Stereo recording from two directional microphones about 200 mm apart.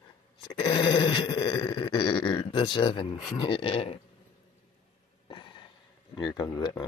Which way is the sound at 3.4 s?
25° left (ahead or behind).